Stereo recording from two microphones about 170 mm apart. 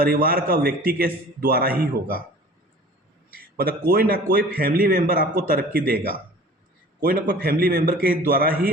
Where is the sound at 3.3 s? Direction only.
60° right (ahead or behind).